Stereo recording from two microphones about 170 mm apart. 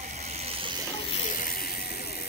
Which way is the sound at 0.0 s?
45° right (ahead or behind).